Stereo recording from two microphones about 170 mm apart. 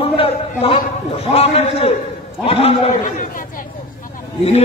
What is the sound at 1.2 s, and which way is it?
A man's voice, 35° left (ahead or behind).